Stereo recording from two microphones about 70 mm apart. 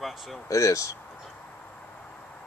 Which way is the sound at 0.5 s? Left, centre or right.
Left.